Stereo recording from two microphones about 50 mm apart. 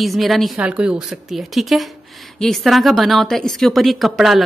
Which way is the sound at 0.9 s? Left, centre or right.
Centre.